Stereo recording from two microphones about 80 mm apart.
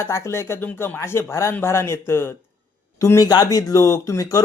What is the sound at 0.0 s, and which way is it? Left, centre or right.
Speech, left.